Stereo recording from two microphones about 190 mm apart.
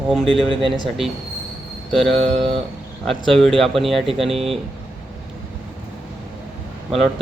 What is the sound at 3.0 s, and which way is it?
Speech, centre (ahead or behind).